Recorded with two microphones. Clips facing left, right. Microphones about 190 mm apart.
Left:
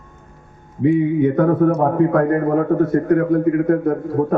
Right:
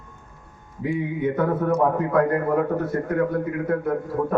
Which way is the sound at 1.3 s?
45° left (ahead or behind).